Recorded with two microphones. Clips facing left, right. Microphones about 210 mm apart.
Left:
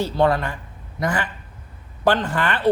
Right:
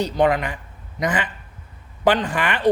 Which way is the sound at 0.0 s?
15° right (ahead or behind).